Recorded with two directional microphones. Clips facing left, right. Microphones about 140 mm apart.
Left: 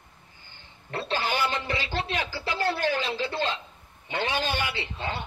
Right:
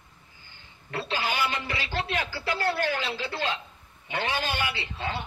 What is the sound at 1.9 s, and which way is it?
Speech, 15° left (ahead or behind).